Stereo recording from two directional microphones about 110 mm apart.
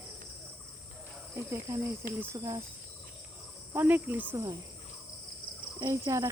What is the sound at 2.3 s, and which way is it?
Speech, 35° right (ahead or behind).